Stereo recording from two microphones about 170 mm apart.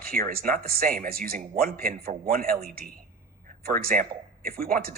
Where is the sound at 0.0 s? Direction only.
60° right (ahead or behind).